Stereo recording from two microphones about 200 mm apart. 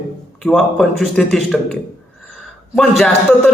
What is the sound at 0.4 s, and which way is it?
A man's voice, 5° left (ahead or behind).